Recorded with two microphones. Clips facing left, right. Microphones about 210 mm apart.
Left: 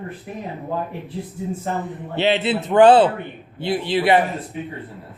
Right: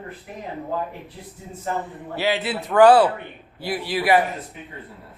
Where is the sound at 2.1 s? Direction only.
25° left (ahead or behind).